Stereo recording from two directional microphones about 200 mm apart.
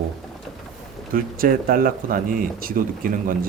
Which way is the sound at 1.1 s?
45° right (ahead or behind).